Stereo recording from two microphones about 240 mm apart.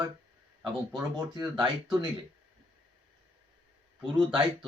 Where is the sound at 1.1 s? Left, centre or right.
Centre.